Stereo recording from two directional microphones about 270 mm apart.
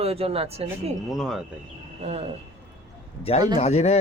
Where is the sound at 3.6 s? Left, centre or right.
Left.